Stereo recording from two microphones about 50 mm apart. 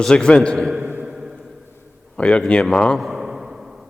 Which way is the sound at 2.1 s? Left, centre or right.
Left.